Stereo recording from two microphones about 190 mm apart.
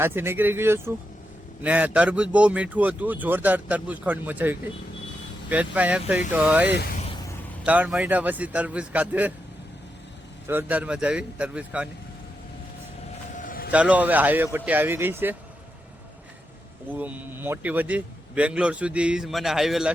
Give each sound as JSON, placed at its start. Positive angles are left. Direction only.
{"t": 0.0, "sound": "a man's voice", "side_deg": -10}
{"t": 10.4, "sound": "a man's voice", "side_deg": -10}
{"t": 13.3, "sound": "vehicle", "side_deg": 45}
{"t": 13.7, "sound": "a man's voice", "side_deg": -5}
{"t": 16.9, "sound": "a man's voice", "side_deg": -10}